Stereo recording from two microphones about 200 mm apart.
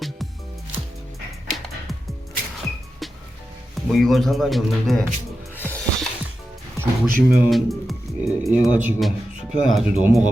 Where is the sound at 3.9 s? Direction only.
Centre (ahead or behind).